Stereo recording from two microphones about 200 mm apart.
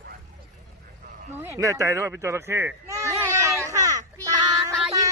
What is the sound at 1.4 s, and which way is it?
Speech, 15° right (ahead or behind).